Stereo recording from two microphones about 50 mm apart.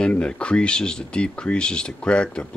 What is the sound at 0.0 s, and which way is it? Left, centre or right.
Speech, centre.